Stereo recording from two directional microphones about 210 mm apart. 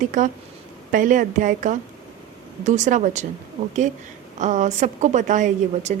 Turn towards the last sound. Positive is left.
turn(degrees=-35)  # may be behind; listen again after turning